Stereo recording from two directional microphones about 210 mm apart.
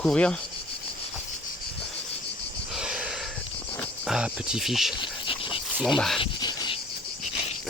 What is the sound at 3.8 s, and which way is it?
Wild animals, centre (ahead or behind).